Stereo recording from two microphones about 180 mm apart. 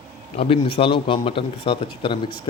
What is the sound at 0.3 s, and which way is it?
Speech, 30° left (ahead or behind).